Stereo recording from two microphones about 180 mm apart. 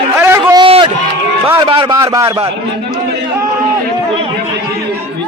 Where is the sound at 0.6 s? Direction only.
25° right (ahead or behind).